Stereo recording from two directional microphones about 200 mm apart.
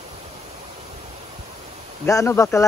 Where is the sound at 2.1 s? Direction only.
15° left (ahead or behind).